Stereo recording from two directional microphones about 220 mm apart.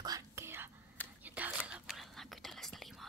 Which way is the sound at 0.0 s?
15° right (ahead or behind).